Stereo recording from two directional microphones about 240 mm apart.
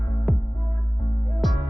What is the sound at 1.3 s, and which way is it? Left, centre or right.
Music, centre.